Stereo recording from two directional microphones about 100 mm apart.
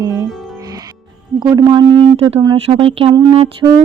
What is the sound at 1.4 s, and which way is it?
Speech, 45° right (ahead or behind).